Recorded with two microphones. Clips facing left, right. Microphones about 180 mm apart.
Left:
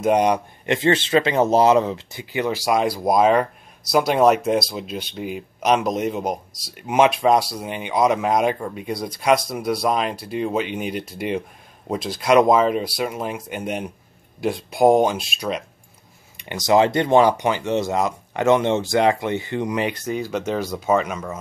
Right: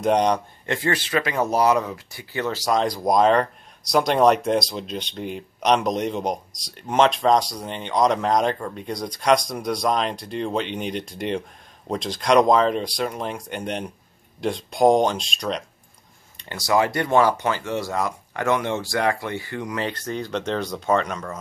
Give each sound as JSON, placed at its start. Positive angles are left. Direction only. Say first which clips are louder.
{"t": 0.0, "sound": "speech", "louder": "left 2 dB", "side_deg": 5}
{"t": 0.7, "sound": "speech", "louder": "left 5 dB", "side_deg": 20}
{"t": 16.3, "sound": "speech", "louder": "left 4 dB", "side_deg": 20}